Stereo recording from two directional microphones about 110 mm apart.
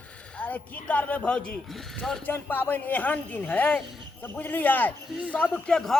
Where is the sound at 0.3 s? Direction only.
15° left (ahead or behind).